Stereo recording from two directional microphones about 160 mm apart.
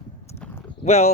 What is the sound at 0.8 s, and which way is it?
Speech, 45° left (ahead or behind).